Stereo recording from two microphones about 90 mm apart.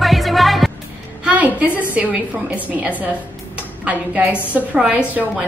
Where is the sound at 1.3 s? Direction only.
15° right (ahead or behind).